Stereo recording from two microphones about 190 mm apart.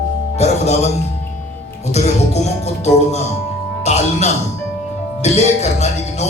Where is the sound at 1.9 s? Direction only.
35° left (ahead or behind).